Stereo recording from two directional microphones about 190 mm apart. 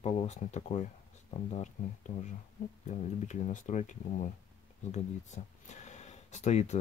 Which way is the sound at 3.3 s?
40° left (ahead or behind).